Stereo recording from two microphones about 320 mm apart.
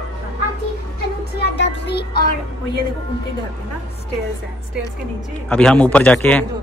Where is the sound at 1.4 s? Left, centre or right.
Left.